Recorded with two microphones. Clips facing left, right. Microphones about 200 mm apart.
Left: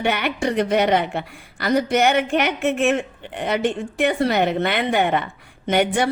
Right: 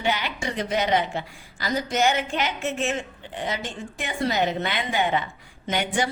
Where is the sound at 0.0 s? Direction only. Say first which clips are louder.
Left 5 dB; 60° left (ahead or behind).